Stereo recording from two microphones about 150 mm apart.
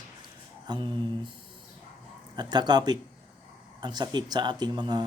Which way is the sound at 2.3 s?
30° right (ahead or behind).